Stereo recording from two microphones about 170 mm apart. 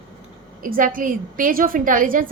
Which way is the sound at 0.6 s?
55° right (ahead or behind).